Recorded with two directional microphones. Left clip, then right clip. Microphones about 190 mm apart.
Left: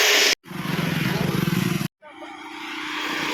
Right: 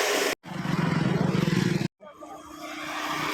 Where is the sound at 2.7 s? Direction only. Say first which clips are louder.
Left 3 dB; 65° right (ahead or behind).